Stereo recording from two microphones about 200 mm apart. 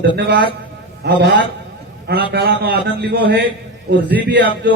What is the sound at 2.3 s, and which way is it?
A man's voice, 55° right (ahead or behind).